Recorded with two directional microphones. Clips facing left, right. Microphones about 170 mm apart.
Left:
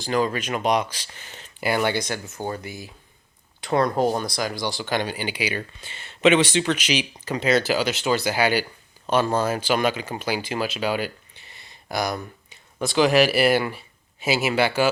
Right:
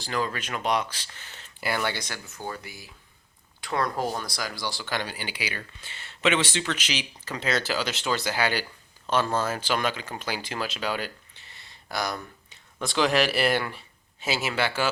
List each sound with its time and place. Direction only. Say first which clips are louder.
0.0 s speech: left 6 dB; 20° left (ahead or behind)